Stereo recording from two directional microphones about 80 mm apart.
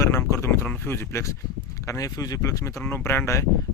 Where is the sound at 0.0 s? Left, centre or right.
Left.